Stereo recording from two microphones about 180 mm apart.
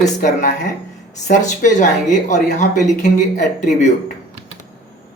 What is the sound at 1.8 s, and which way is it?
Speech, 45° left (ahead or behind).